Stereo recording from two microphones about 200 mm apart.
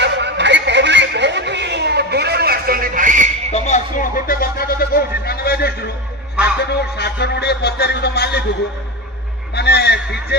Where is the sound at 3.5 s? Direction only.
35° left (ahead or behind); by 5.9 s 50° left (ahead or behind).